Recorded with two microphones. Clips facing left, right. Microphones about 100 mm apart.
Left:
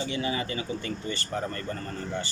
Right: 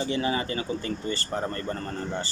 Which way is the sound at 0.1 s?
35° right (ahead or behind).